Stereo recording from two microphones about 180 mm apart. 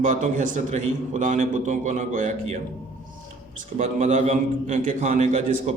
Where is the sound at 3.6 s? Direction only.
45° right (ahead or behind).